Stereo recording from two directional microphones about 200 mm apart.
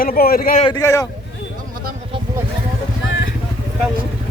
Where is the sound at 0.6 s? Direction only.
20° left (ahead or behind).